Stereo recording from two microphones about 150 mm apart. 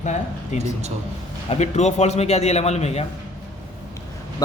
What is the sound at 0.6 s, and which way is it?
Speech, 50° right (ahead or behind).